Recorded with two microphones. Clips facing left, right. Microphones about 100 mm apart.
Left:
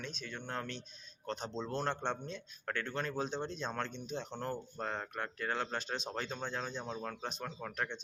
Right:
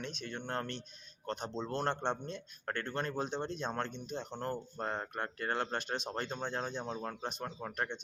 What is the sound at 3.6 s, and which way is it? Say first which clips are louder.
Speech: right 2 dB; 15° right (ahead or behind).